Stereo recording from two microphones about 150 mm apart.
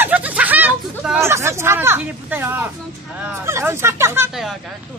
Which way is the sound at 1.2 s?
20° right (ahead or behind).